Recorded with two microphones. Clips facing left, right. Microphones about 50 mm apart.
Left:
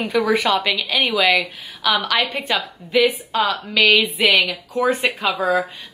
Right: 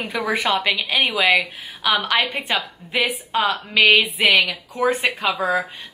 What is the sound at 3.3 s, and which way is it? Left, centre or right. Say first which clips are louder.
Speech: even; right.